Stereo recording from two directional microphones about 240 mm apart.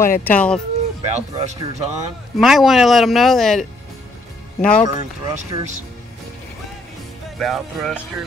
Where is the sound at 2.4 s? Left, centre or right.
Centre.